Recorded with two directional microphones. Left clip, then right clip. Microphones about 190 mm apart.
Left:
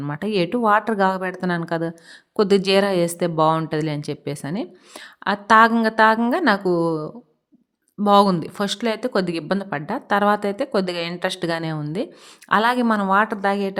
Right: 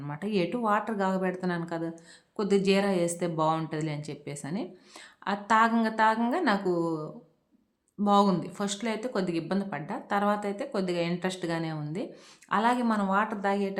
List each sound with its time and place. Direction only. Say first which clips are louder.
0.0 s a woman's voice: left 8 dB; 50° left (ahead or behind)